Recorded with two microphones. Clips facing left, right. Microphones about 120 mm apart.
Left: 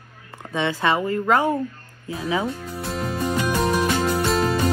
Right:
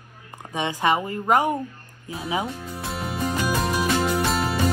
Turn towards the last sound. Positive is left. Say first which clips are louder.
# left 3 dB
turn(degrees=0)  # may be behind; listen again after turning